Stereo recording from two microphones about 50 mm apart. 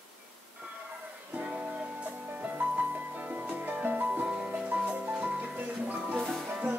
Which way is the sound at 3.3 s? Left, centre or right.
Right.